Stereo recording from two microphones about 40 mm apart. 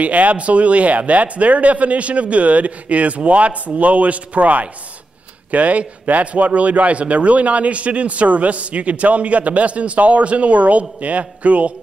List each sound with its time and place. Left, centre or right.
0.0 s speech: right